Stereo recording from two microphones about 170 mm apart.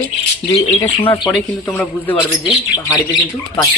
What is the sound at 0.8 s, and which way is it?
Speech, 20° left (ahead or behind).